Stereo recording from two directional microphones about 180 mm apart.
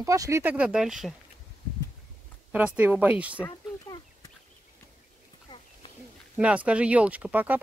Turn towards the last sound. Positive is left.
turn(degrees=-10)  # may be behind; listen again after turning